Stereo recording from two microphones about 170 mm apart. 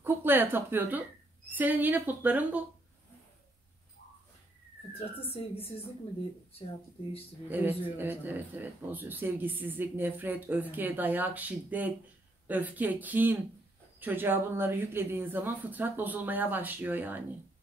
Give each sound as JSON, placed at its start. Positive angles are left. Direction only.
{"t": 0.0, "sound": "a woman's voice", "side_deg": -10}
{"t": 5.3, "sound": "a woman's voice", "side_deg": 35}
{"t": 7.4, "sound": "a man's voice", "side_deg": -10}